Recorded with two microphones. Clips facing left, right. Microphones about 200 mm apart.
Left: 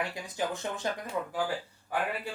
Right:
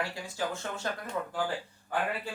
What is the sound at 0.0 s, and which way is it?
Speech, 20° left (ahead or behind).